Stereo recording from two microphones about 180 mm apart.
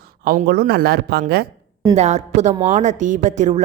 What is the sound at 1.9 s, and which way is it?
Speech, 40° right (ahead or behind).